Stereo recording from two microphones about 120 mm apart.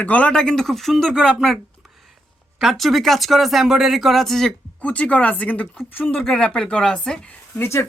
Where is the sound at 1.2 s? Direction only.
Centre (ahead or behind).